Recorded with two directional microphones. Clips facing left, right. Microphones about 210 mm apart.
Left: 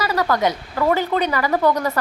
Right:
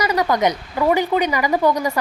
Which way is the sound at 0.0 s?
15° right (ahead or behind).